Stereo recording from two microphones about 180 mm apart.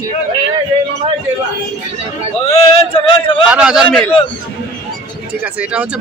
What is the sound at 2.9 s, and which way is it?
Speech, 30° left (ahead or behind).